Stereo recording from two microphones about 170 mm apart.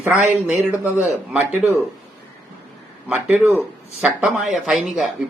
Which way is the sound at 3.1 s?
10° right (ahead or behind).